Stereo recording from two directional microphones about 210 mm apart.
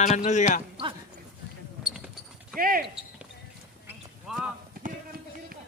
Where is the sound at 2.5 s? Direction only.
45° right (ahead or behind).